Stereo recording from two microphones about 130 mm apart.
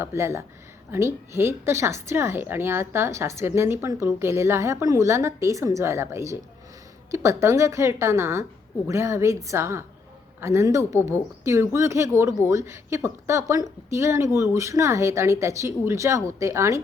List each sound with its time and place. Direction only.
0.0 s a woman's voice: 20° right (ahead or behind)